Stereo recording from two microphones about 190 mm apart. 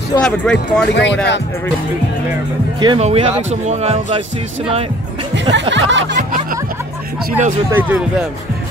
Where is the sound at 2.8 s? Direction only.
25° right (ahead or behind).